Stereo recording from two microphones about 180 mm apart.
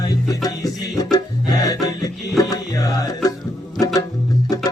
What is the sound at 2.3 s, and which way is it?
Music, 20° left (ahead or behind).